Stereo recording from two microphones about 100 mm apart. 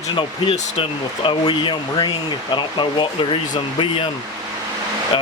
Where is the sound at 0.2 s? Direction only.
65° left (ahead or behind).